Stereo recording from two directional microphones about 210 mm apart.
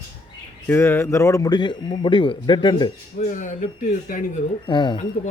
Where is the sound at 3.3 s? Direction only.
35° left (ahead or behind).